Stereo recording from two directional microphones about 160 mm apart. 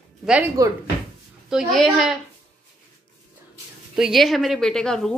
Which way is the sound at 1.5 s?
Centre (ahead or behind).